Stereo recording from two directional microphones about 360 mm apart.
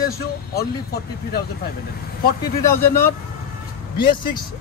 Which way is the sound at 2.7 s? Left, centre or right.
Centre.